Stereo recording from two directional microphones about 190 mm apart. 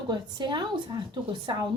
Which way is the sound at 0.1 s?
25° right (ahead or behind).